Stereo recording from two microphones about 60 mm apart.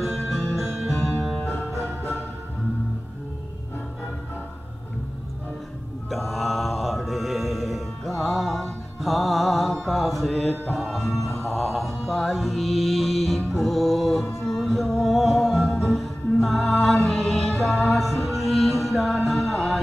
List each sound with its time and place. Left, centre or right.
0.0 s music: centre
1.4 s music: left
6.0 s mantra: centre